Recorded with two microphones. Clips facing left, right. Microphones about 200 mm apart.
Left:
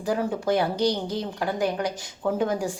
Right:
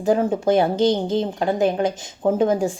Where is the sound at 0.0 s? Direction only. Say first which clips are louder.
Right 7 dB; 25° right (ahead or behind).